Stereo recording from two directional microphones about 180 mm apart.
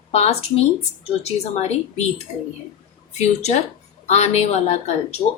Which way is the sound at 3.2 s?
40° left (ahead or behind).